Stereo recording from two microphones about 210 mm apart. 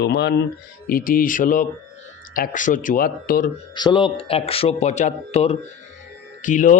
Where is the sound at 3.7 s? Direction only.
20° left (ahead or behind).